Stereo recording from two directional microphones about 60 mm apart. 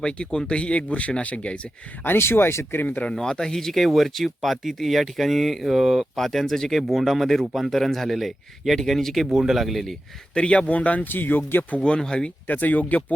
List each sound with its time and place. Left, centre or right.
0.0 s speech: centre
2.0 s speech: left
2.8 s speech: left
3.1 s speech: centre
9.2 s speech: centre
10.3 s speech: centre; by 11.6 s left
11.7 s speech: centre
12.5 s speech: left